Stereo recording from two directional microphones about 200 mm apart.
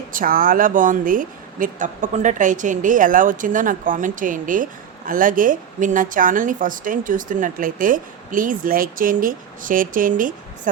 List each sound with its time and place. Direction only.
0.1 s speech: 45° right (ahead or behind)